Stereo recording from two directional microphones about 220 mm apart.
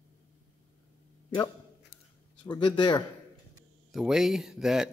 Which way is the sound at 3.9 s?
Centre (ahead or behind).